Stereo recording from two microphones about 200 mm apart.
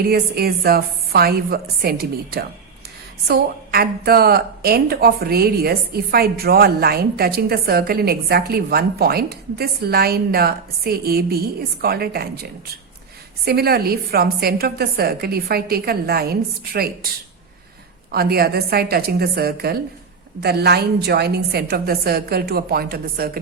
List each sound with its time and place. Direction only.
0.0 s a woman's voice: 50° right (ahead or behind)
18.1 s a woman's voice: 50° right (ahead or behind)